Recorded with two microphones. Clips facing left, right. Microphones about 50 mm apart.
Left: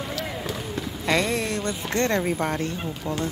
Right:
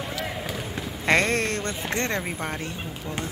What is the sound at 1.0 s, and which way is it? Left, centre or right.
Speech, right.